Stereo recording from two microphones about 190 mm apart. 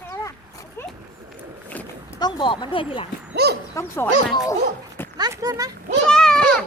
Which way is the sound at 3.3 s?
60° right (ahead or behind).